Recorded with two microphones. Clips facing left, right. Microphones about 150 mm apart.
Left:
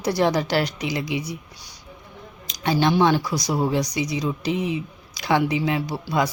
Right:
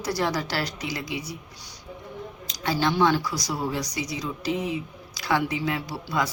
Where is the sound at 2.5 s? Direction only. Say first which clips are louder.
Left 5 dB; 20° left (ahead or behind).